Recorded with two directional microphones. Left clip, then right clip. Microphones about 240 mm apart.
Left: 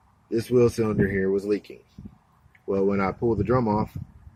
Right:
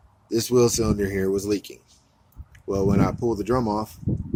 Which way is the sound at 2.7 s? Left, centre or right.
Centre.